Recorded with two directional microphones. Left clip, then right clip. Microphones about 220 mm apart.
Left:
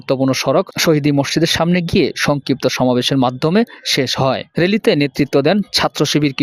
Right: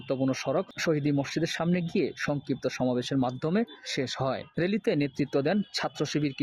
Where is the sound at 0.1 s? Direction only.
45° left (ahead or behind).